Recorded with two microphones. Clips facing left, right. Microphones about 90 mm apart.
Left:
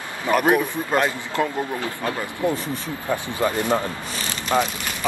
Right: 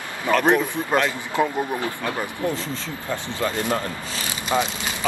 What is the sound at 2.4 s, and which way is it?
Speech, 15° left (ahead or behind).